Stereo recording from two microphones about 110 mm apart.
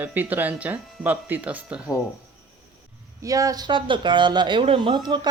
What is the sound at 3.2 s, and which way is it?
Speech, 30° right (ahead or behind).